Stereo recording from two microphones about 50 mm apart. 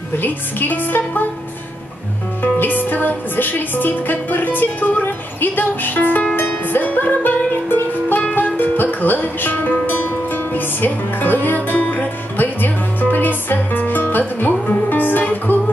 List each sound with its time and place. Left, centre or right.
0.2 s music: left
2.4 s music: left